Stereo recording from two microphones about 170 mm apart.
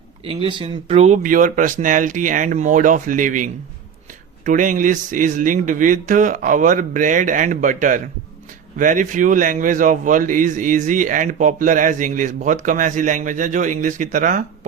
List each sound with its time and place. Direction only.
0.3 s a man's voice: 30° right (ahead or behind); by 14.7 s 50° right (ahead or behind)